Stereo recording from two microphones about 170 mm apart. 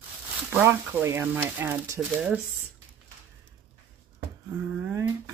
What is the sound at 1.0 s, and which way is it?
Speech, 15° right (ahead or behind).